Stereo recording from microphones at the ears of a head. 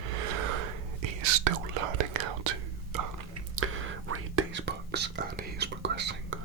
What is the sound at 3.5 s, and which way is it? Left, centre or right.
Whispering, right.